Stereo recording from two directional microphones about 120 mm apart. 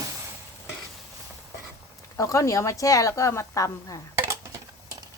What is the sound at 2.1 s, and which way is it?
A woman's voice, 25° left (ahead or behind).